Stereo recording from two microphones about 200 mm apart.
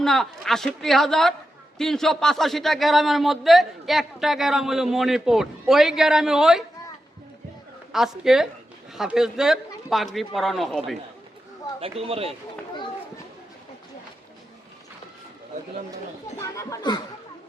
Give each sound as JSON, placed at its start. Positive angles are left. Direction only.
{"t": 0.0, "sound": "a man's voice", "side_deg": 0}
{"t": 7.9, "sound": "a man's voice", "side_deg": 0}
{"t": 11.8, "sound": "speech", "side_deg": -30}
{"t": 16.4, "sound": "speech", "side_deg": 15}